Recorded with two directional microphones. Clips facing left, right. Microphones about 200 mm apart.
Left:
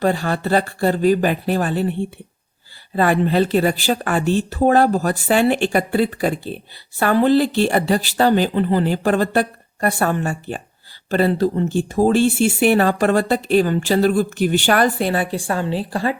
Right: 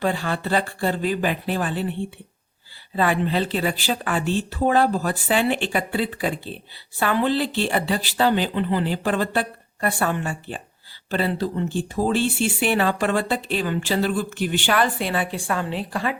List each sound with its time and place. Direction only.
0.0 s speech: 40° left (ahead or behind)